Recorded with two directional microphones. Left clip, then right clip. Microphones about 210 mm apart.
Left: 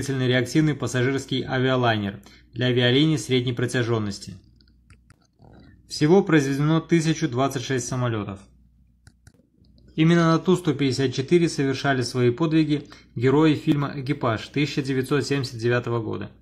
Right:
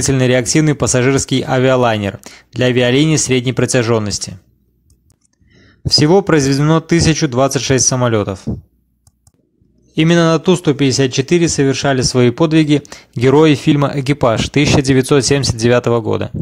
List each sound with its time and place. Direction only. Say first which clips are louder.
0.1 s speech: right 9 dB; 45° right (ahead or behind)
5.9 s speech: right 8 dB; 35° right (ahead or behind)
9.9 s speech: right 8 dB; 35° right (ahead or behind)